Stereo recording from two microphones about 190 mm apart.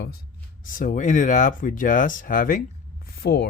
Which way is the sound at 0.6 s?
45° left (ahead or behind).